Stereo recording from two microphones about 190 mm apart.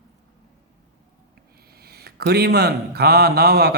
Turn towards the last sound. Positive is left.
turn(degrees=-55)  # may be behind; listen again after turning